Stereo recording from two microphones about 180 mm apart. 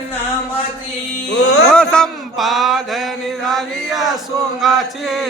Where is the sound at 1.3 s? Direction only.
65° left (ahead or behind).